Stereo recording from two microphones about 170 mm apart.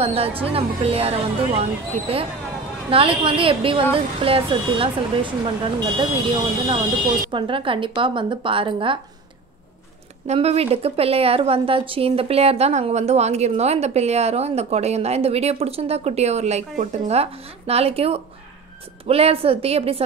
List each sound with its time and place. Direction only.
0.0 s a woman's voice: 35° right (ahead or behind)
7.2 s a woman's voice: 30° right (ahead or behind)
10.2 s a woman's voice: 40° right (ahead or behind)